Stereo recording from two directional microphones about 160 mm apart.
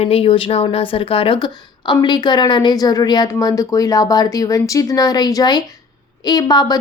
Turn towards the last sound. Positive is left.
turn(degrees=25)  # may be behind; listen again after turning